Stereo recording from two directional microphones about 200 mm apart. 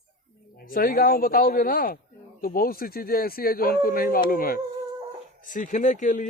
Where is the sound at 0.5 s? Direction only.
45° left (ahead or behind).